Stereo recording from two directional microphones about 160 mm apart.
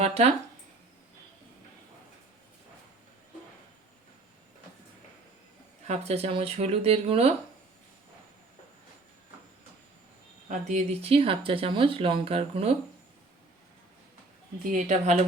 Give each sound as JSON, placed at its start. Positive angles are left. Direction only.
{"t": 0.0, "sound": "speech", "side_deg": -40}
{"t": 5.9, "sound": "speech", "side_deg": -40}
{"t": 10.7, "sound": "speech", "side_deg": -45}
{"t": 14.7, "sound": "speech", "side_deg": -45}